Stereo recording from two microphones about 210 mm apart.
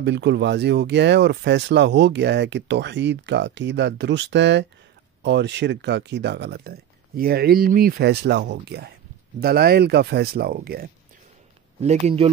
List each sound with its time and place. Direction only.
0.0 s speech: 55° right (ahead or behind)
11.8 s speech: 30° right (ahead or behind)